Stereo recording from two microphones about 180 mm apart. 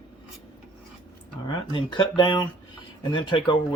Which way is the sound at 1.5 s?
25° left (ahead or behind).